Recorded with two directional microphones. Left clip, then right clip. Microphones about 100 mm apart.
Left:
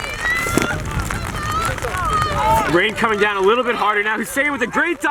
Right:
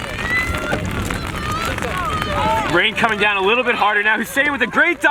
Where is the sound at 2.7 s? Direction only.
70° right (ahead or behind).